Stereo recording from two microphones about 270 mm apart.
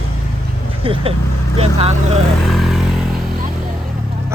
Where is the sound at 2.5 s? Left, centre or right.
Centre.